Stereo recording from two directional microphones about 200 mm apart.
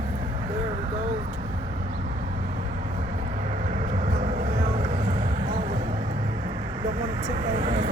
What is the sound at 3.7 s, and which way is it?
Vehicle, 35° right (ahead or behind).